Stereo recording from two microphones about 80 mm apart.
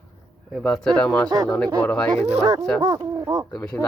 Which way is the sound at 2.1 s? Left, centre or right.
Right.